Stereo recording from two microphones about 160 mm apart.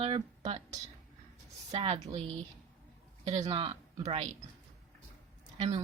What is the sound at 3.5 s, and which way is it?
Speech, 35° right (ahead or behind).